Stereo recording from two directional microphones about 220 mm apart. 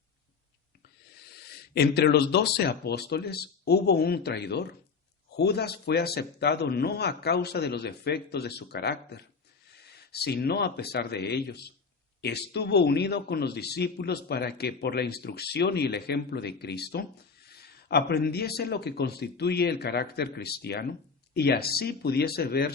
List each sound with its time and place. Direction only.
1.5 s a man's voice: 45° left (ahead or behind)